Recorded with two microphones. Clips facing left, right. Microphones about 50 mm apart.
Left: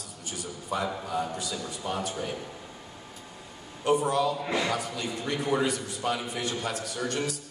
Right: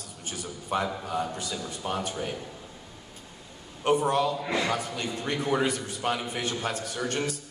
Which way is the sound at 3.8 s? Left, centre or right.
Right.